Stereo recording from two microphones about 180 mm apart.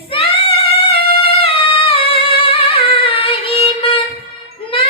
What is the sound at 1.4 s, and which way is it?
Singing, 30° left (ahead or behind).